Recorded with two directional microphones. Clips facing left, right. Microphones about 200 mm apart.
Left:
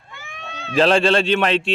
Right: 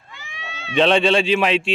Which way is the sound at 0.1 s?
55° left (ahead or behind).